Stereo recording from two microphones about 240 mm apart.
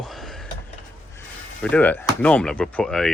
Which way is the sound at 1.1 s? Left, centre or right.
Centre.